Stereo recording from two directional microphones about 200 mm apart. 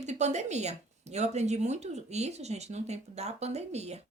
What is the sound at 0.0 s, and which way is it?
Speech, 35° right (ahead or behind).